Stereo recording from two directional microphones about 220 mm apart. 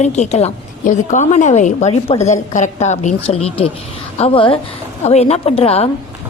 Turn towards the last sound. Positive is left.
turn(degrees=25)  # may be behind; listen again after turning